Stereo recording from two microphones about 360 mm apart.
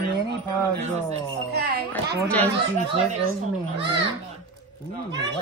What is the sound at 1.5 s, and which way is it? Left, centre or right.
Speech, right.